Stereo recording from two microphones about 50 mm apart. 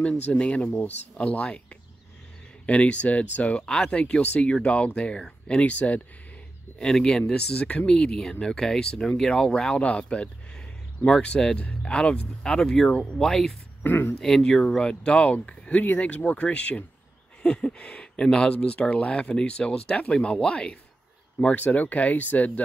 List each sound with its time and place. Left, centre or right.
0.3 s speech: left
3.6 s speech: centre
6.8 s speech: centre
7.8 s speech: centre
9.8 s speech: left
13.8 s speech: left
14.2 s speech: centre
21.5 s speech: left